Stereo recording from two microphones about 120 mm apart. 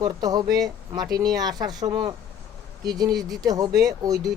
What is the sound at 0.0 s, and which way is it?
Speech, 35° right (ahead or behind).